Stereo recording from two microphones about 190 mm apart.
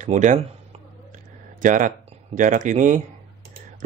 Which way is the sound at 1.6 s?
45° right (ahead or behind).